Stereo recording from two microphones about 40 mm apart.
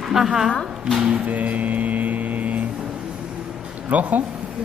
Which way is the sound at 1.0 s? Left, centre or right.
Right.